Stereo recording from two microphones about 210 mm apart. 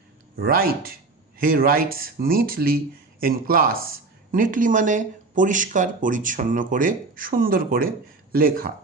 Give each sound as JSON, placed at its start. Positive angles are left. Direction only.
{"t": 0.3, "sound": "speech", "side_deg": -45}